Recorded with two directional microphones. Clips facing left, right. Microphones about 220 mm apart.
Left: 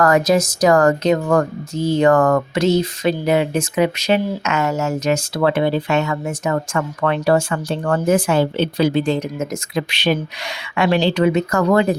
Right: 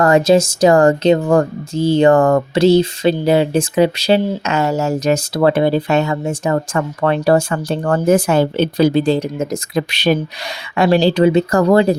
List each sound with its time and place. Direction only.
0.0 s speech: 25° right (ahead or behind)